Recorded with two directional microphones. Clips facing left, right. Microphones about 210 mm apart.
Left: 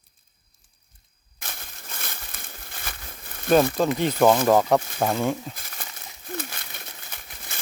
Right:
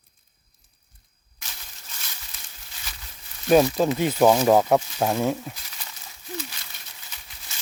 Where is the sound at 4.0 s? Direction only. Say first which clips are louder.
Even; 5° right (ahead or behind).